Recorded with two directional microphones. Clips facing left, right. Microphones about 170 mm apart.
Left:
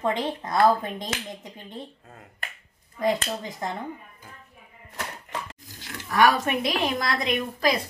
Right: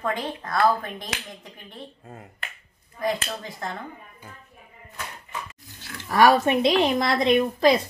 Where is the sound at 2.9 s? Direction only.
20° left (ahead or behind).